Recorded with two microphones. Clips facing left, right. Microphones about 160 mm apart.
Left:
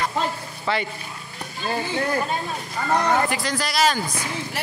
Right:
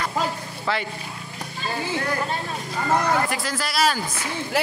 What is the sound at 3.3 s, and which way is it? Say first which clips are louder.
Speech: left 2 dB; centre (ahead or behind).